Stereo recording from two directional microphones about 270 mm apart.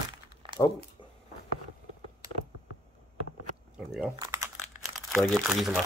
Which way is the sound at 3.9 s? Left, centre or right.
Centre.